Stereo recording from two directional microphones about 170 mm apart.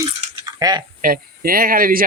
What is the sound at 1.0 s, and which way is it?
Speech, 55° right (ahead or behind).